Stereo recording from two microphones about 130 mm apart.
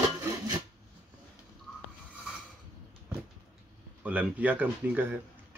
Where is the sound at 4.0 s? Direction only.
10° right (ahead or behind).